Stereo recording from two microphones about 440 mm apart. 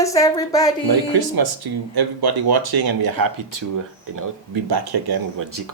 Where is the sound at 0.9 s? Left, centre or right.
Right.